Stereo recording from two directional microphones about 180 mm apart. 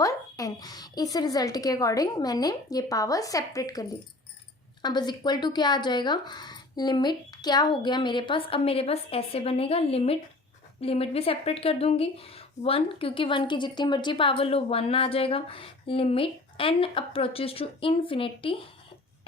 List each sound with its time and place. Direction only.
0.0 s a woman's voice: 20° left (ahead or behind)